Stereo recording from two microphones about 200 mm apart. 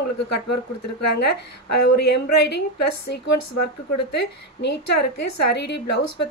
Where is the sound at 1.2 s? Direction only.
55° left (ahead or behind).